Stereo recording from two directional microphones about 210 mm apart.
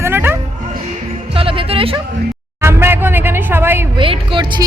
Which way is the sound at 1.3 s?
25° right (ahead or behind).